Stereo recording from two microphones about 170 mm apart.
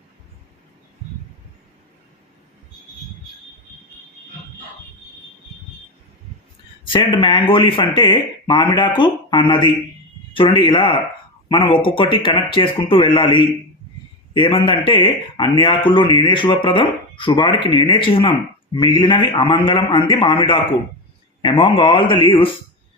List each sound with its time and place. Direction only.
6.8 s a man's voice: 30° left (ahead or behind)